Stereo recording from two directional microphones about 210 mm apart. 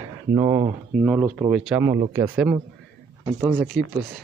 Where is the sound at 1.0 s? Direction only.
5° right (ahead or behind).